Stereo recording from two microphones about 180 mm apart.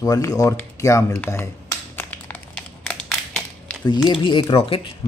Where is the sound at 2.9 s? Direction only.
5° left (ahead or behind).